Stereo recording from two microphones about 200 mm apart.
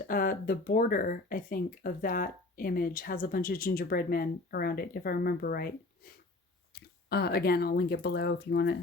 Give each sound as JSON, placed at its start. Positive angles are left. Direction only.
{"t": 0.1, "sound": "speech", "side_deg": 45}